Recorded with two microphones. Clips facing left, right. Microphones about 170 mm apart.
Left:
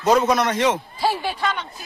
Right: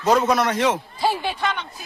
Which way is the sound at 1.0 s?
20° right (ahead or behind).